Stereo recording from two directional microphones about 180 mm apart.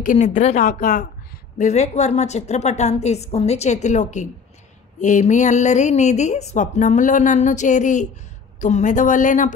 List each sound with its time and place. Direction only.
0.0 s a woman's voice: 45° left (ahead or behind)